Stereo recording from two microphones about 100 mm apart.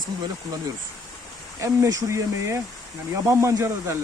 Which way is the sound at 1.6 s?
30° right (ahead or behind).